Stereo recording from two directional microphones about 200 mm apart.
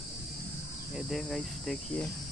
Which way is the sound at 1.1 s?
Centre (ahead or behind).